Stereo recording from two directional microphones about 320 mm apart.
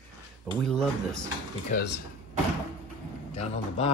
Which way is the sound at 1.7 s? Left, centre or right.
Left.